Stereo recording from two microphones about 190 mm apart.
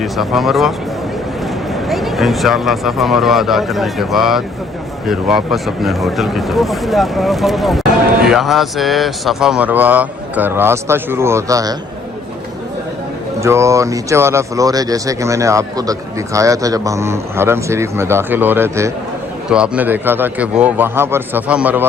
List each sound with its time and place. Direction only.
0.0 s speech: centre (ahead or behind)
1.7 s speech: centre (ahead or behind); by 11.8 s 20° right (ahead or behind)
13.4 s speech: 15° right (ahead or behind)